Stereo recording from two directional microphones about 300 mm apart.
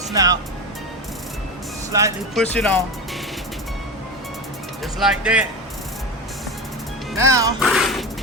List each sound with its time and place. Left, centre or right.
0.1 s speech: centre
1.9 s speech: centre
2.3 s speech: centre
4.8 s speech: centre
7.1 s speech: centre